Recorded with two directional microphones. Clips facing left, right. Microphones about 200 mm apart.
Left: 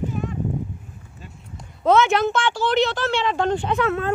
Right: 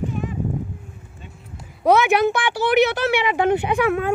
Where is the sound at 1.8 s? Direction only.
15° right (ahead or behind).